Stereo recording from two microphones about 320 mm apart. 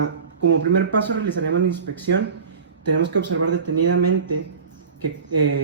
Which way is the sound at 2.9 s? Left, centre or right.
Right.